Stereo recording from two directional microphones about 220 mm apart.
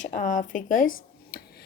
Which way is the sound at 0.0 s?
35° left (ahead or behind).